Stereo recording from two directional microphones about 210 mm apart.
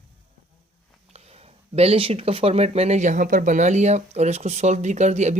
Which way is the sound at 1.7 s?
30° right (ahead or behind).